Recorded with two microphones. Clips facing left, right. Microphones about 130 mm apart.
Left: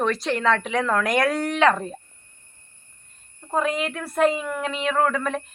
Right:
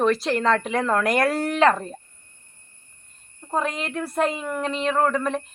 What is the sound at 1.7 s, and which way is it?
Speech, 5° left (ahead or behind).